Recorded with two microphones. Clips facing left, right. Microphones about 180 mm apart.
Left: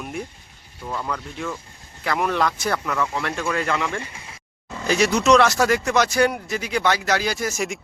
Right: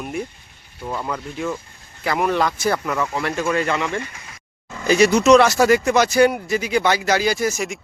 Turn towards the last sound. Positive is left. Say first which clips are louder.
# right 4 dB
turn(degrees=0)  # may be behind; listen again after turning